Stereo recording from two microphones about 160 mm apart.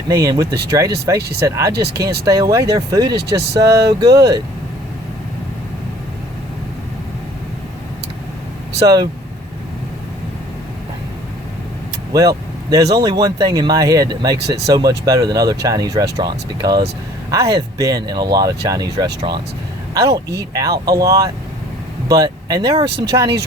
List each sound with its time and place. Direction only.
0.1 s speech: 20° right (ahead or behind)
1.7 s speech: 90° right
2.2 s speech: 20° right (ahead or behind)
12.1 s speech: 20° right (ahead or behind)
14.3 s speech: 90° right
14.7 s speech: 25° right (ahead or behind)